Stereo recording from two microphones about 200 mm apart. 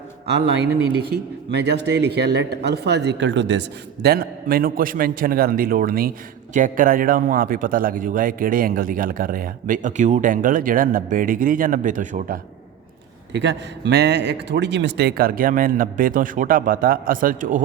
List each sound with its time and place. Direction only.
1.5 s speech: 55° right (ahead or behind); by 12.4 s 40° right (ahead or behind)
13.3 s speech: 60° right (ahead or behind); by 17.6 s 40° right (ahead or behind)